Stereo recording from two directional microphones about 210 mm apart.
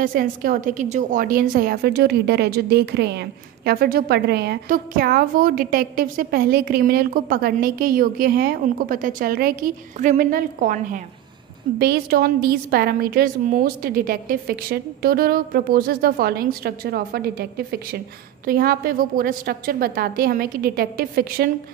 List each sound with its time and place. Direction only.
0.0 s a woman's voice: 40° right (ahead or behind)